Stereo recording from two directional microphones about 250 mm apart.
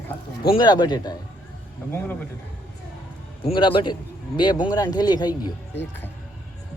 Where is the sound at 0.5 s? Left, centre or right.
Centre.